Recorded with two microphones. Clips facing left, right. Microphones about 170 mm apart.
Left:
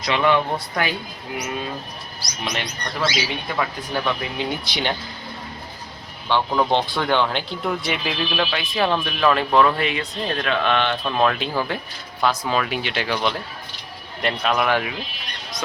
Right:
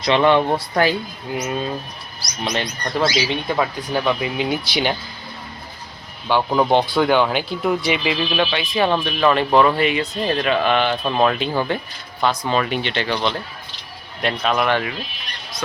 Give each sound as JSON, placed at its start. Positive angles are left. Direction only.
{"t": 0.0, "sound": "speech", "side_deg": -30}
{"t": 2.4, "sound": "speech", "side_deg": -35}
{"t": 3.9, "sound": "speech", "side_deg": -5}
{"t": 6.2, "sound": "speech", "side_deg": -15}